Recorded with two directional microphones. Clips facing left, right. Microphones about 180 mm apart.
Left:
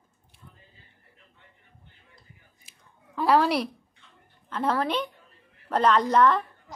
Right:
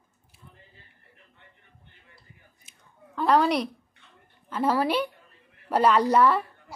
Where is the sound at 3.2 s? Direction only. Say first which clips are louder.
Even; 5° left (ahead or behind).